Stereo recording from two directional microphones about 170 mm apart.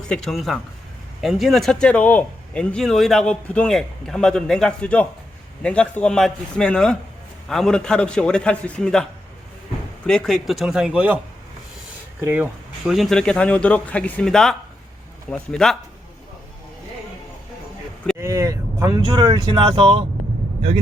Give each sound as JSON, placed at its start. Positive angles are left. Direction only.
{"t": 0.1, "sound": "speech", "side_deg": 0}
{"t": 10.1, "sound": "speech", "side_deg": 5}
{"t": 12.2, "sound": "speech", "side_deg": -10}
{"t": 18.2, "sound": "speech", "side_deg": -20}